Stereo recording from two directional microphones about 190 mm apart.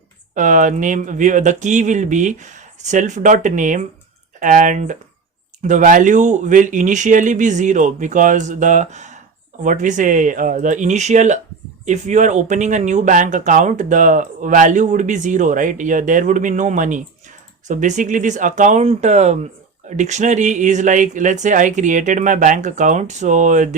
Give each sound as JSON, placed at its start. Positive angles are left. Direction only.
{"t": 0.3, "sound": "speech", "side_deg": -40}